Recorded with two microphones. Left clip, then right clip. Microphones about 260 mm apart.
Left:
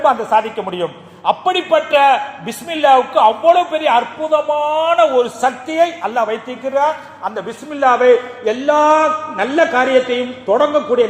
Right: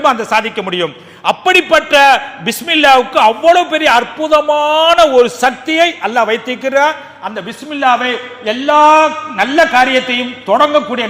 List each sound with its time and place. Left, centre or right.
0.3 s a man's voice: right